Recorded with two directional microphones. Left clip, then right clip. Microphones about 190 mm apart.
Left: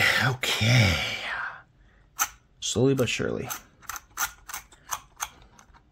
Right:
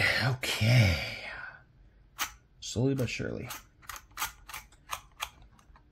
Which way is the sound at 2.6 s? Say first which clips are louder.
Left 8 dB; 50° left (ahead or behind).